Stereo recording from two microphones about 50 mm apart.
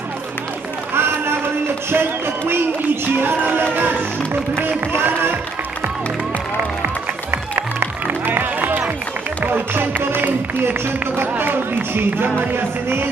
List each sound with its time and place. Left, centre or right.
0.9 s speech: right
3.7 s music: right
7.8 s music: right
10.7 s speech: right
12.4 s music: right